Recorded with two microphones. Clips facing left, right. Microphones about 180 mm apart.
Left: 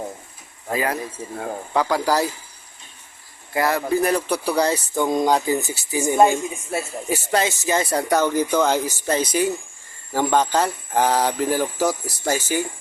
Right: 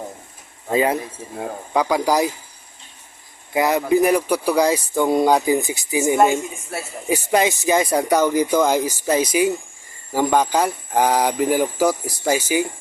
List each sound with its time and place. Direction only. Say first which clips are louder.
0.7 s speech: right 5 dB; 25° right (ahead or behind)
3.5 s speech: right 3 dB; 20° right (ahead or behind)